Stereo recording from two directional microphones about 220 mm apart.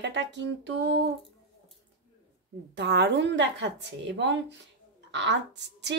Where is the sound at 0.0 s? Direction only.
55° right (ahead or behind).